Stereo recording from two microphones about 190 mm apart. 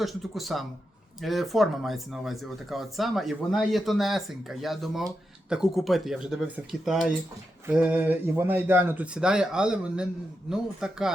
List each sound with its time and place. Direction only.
0.0 s speech: centre (ahead or behind)